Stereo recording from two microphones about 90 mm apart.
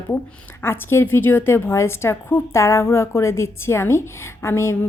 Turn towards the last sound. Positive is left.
turn(degrees=30)  # may be behind; listen again after turning